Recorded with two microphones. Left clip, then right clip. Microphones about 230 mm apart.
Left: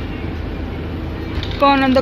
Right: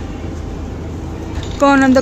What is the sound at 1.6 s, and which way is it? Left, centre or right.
Speech, right.